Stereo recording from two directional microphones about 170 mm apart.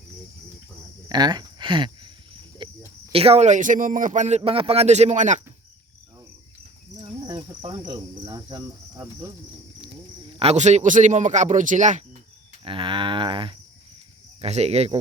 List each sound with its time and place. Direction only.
1.0 s cricket: 25° right (ahead or behind)
3.1 s speech: 35° right (ahead or behind)
7.0 s cricket: 30° right (ahead or behind)
10.4 s speech: 40° right (ahead or behind)
12.6 s a sound: 30° right (ahead or behind)
14.4 s speech: 40° right (ahead or behind)